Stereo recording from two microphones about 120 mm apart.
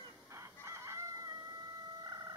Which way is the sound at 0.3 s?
25° right (ahead or behind).